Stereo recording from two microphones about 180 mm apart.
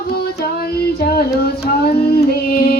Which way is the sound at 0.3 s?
60° left (ahead or behind).